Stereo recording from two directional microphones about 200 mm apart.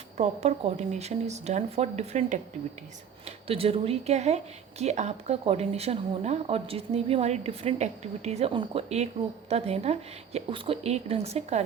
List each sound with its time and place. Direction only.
0.2 s speech: 35° right (ahead or behind)